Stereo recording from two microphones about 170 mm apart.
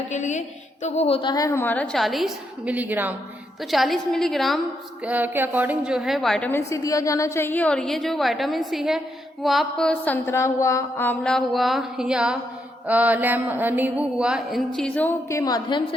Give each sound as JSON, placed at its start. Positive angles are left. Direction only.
{"t": 0.1, "sound": "a woman's voice", "side_deg": 45}
{"t": 3.7, "sound": "mantra", "side_deg": 0}
{"t": 5.0, "sound": "mantra", "side_deg": -10}
{"t": 6.5, "sound": "a woman's voice", "side_deg": 20}
{"t": 9.4, "sound": "mantra", "side_deg": 0}
{"t": 12.9, "sound": "a woman's voice", "side_deg": -10}
{"t": 14.8, "sound": "a woman's voice", "side_deg": 5}